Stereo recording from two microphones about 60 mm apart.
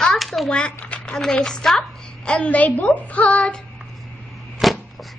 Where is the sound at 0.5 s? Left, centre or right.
Centre.